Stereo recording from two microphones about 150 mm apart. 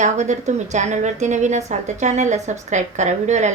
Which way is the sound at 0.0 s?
50° right (ahead or behind).